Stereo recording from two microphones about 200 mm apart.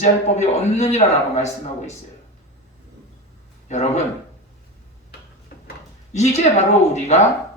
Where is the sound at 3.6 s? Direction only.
35° left (ahead or behind).